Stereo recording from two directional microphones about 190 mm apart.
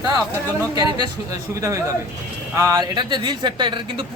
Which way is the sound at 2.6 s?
20° right (ahead or behind).